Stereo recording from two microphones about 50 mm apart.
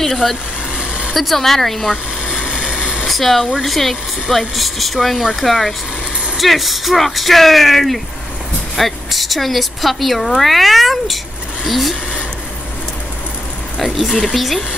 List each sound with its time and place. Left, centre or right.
0.0 s speech: centre
0.7 s a sound: right
1.1 s a woman's voice: centre
2.4 s a sound: centre
3.1 s a woman's voice: centre
14.0 s a woman's voice: centre